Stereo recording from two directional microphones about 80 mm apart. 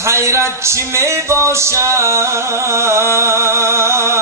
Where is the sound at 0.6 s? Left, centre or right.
Right.